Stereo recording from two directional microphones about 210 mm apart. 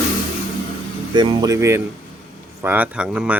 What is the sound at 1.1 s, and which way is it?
Speech, 20° right (ahead or behind).